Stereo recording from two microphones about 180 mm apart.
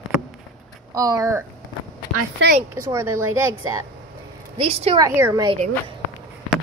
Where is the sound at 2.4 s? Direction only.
90° right.